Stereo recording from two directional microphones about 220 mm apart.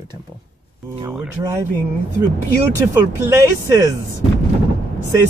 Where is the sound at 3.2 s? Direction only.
10° right (ahead or behind).